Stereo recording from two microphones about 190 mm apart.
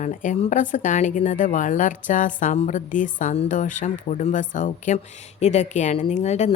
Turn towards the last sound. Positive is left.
turn(degrees=35)  # may be behind; listen again after turning